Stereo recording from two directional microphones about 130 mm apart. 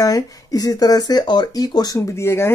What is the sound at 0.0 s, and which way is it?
Speech, 25° left (ahead or behind).